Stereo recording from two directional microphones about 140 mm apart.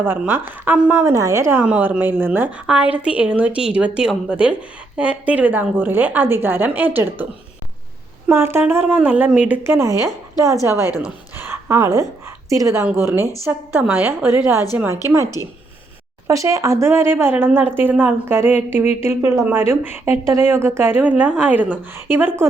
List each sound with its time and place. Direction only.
0.0 s speech: 15° right (ahead or behind)
8.3 s a woman's voice: 15° right (ahead or behind)
10.8 s speech: 25° left (ahead or behind)
11.3 s a woman's voice: 15° right (ahead or behind)